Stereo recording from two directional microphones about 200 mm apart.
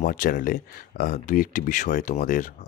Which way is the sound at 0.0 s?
45° left (ahead or behind).